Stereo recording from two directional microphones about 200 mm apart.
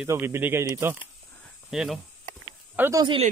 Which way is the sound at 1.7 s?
Centre (ahead or behind).